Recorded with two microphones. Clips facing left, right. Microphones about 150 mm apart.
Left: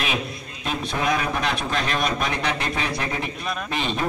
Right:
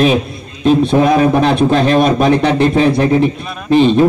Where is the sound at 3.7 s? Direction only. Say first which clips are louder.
Right 19 dB; 30° right (ahead or behind).